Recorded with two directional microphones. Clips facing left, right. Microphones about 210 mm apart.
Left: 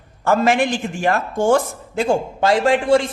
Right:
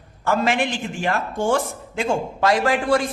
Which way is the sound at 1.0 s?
45° left (ahead or behind).